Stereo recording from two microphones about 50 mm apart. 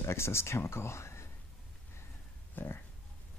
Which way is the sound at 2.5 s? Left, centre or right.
Left.